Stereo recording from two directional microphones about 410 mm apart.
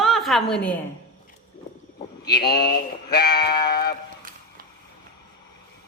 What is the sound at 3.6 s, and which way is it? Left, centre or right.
Speech, left.